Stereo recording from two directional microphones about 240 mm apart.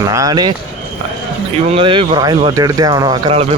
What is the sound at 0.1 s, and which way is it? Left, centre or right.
Speech, centre.